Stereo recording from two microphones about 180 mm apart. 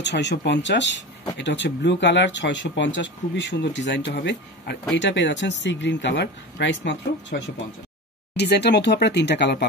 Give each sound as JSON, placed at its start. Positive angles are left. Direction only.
{"t": 0.0, "sound": "speech", "side_deg": 75}
{"t": 4.9, "sound": "speech", "side_deg": 80}
{"t": 8.4, "sound": "speech", "side_deg": 65}